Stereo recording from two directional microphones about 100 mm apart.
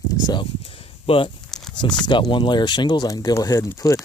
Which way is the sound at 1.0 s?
65° left (ahead or behind).